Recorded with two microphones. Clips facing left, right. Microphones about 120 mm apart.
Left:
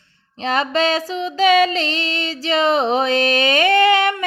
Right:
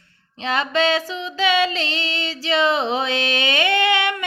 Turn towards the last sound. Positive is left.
turn(degrees=40)  # may be behind; listen again after turning